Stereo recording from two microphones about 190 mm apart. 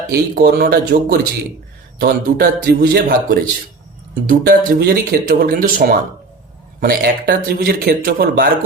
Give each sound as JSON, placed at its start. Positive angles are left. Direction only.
{"t": 0.1, "sound": "speech", "side_deg": -55}